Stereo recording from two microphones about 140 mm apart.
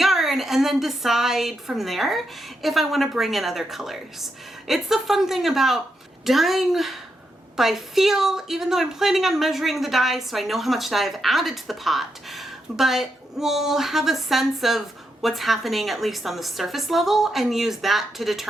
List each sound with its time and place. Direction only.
0.0 s a woman's voice: centre (ahead or behind)